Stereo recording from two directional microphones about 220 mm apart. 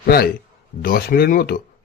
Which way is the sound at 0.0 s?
45° left (ahead or behind).